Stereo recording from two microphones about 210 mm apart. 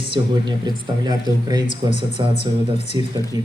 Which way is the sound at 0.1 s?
20° right (ahead or behind).